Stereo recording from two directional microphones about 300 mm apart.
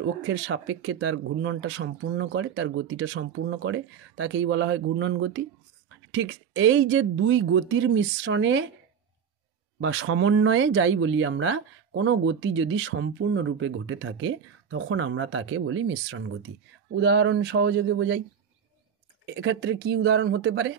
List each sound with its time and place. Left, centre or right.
0.3 s speech: right
9.8 s speech: right
19.2 s speech: right